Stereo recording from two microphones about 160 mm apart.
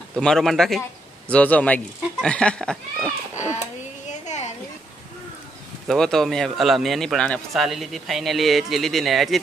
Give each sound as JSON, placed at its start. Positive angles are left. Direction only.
{"t": 0.2, "sound": "speech", "side_deg": 5}
{"t": 3.3, "sound": "a sound", "side_deg": 45}
{"t": 5.9, "sound": "speech", "side_deg": 0}